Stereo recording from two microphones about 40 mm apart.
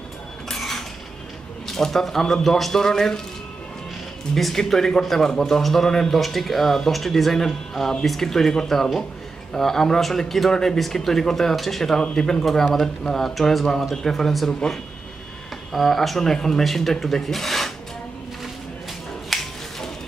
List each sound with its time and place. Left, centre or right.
0.5 s dishes: centre
1.8 s speech: centre
4.4 s speech: centre
5.9 s speech: centre
12.0 s speech: centre
13.1 s speech: centre
15.7 s speech: centre
19.3 s a sound: centre